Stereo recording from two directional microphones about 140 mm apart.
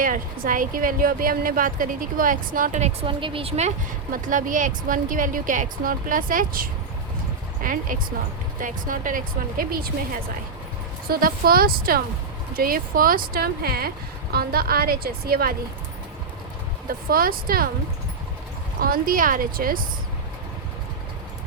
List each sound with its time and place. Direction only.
0.0 s a woman's voice: 75° right (ahead or behind); by 3.1 s 55° right (ahead or behind)
3.1 s a woman's voice: 35° right (ahead or behind)
4.1 s a woman's voice: 70° right (ahead or behind); by 6.7 s 90° right
7.6 s a woman's voice: 80° right
11.1 s speech: 90° right
17.1 s speech: 90° right
18.8 s speech: 90° right